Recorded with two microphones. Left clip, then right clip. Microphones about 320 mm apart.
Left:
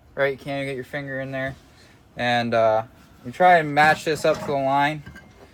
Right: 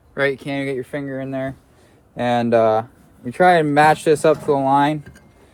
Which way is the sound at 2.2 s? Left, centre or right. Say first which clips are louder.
Right 4 dB; centre.